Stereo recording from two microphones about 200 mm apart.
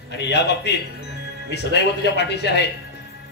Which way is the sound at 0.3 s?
55° left (ahead or behind).